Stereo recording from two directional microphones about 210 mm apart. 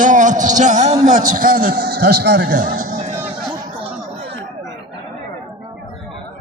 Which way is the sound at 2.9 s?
40° right (ahead or behind).